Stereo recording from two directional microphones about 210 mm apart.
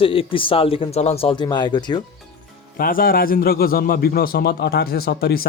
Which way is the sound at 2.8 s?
45° left (ahead or behind).